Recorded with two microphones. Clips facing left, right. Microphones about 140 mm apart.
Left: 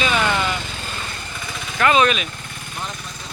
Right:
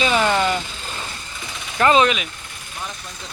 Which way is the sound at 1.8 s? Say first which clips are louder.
Right 1 dB; 25° right (ahead or behind).